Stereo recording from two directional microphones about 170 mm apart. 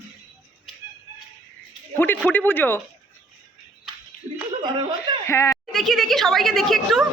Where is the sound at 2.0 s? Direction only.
10° left (ahead or behind).